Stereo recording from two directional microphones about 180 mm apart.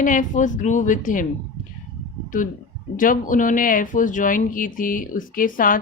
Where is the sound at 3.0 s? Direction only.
50° left (ahead or behind).